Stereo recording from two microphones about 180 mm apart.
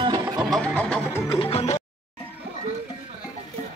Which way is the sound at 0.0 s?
25° right (ahead or behind).